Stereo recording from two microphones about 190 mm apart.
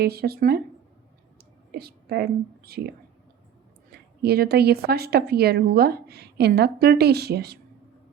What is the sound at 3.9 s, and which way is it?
A woman's voice, 55° right (ahead or behind).